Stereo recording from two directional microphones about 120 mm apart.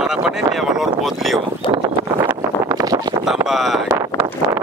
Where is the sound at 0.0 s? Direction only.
5° right (ahead or behind).